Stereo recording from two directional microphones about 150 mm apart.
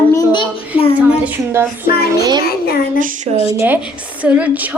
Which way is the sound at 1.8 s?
90° left.